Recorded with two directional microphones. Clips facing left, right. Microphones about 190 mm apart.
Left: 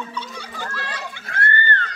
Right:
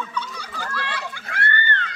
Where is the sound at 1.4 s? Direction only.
45° left (ahead or behind).